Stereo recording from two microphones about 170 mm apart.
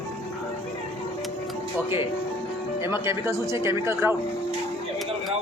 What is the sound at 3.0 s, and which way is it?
Speech, 15° right (ahead or behind).